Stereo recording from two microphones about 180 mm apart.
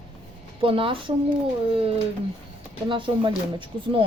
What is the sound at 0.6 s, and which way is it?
Speech, 30° right (ahead or behind).